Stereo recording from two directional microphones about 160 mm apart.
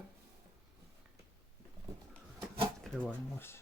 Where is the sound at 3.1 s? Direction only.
15° left (ahead or behind).